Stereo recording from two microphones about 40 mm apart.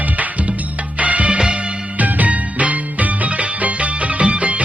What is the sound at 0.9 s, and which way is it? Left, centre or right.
Music, right.